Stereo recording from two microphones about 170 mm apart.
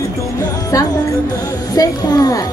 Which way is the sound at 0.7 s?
20° left (ahead or behind).